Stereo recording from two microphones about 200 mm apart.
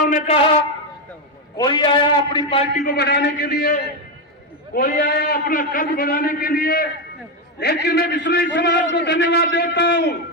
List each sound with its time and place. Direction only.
0.0 s a sound: 40° left (ahead or behind)
1.5 s a man's voice: 20° left (ahead or behind)
2.7 s a man's voice: 50° left (ahead or behind)